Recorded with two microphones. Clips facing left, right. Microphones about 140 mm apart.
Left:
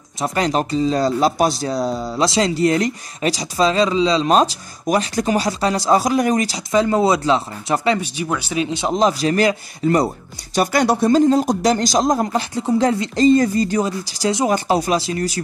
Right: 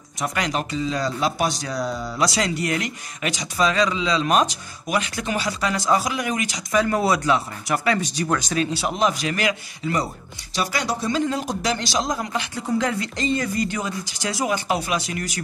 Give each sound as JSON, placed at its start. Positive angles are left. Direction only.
{"t": 0.2, "sound": "speech", "side_deg": 35}
{"t": 8.0, "sound": "speech", "side_deg": 10}
{"t": 8.9, "sound": "speech", "side_deg": 35}
{"t": 11.1, "sound": "speech", "side_deg": 40}
{"t": 12.5, "sound": "speech", "side_deg": 30}